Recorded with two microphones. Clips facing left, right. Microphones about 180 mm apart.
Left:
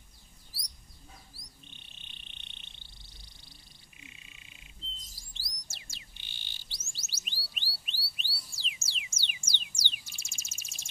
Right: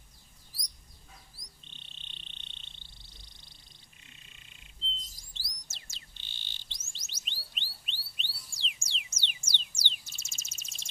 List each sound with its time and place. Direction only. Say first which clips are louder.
1.4 s frog: left 3 dB; 10° left (ahead or behind)
2.7 s a sound: even; 10° left (ahead or behind)
4.0 s frog: left 7 dB; 5° left (ahead or behind)
5.1 s bird: even; 10° left (ahead or behind)